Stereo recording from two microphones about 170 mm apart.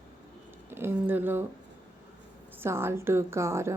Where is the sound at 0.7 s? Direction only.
15° right (ahead or behind).